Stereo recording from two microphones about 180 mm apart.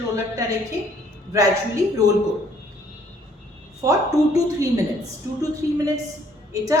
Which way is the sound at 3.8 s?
20° right (ahead or behind).